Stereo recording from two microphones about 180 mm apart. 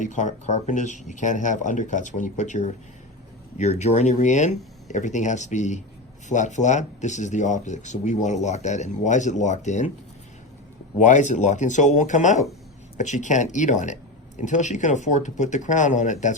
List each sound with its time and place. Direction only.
0.0 s speech: 40° left (ahead or behind)
11.0 s speech: 40° left (ahead or behind)